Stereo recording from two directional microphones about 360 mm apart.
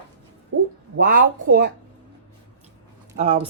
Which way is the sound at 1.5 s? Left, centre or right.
Right.